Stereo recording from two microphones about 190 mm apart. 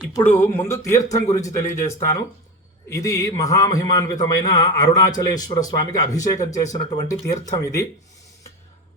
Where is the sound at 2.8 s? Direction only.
15° left (ahead or behind).